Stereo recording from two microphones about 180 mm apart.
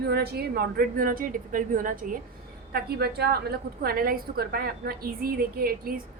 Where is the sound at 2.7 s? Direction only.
60° right (ahead or behind).